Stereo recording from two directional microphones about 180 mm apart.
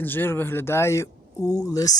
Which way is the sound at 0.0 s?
10° left (ahead or behind).